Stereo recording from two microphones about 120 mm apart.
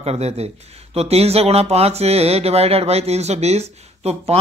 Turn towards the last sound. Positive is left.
turn(degrees=-60)  # may be behind; listen again after turning